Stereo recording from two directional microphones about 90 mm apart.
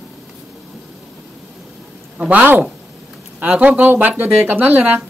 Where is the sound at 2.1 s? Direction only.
15° right (ahead or behind).